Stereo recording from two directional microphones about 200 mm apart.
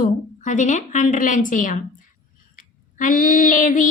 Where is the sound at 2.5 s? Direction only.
40° left (ahead or behind).